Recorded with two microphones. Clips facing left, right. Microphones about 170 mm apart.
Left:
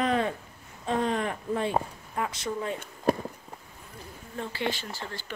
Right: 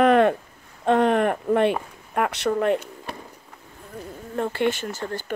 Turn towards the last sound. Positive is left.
turn(degrees=-50)  # may be behind; listen again after turning